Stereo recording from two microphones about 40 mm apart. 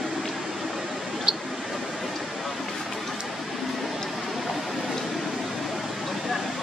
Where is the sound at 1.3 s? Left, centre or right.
Centre.